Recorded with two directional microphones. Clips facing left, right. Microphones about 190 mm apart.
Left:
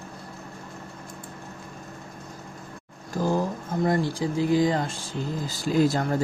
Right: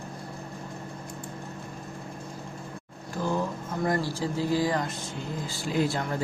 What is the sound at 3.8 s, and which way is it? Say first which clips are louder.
Speech: left 3 dB; 25° left (ahead or behind).